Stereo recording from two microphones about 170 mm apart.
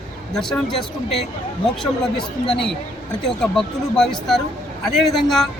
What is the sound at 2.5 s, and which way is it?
A man's voice, 5° left (ahead or behind).